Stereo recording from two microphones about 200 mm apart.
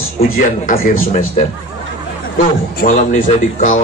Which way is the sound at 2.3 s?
40° left (ahead or behind).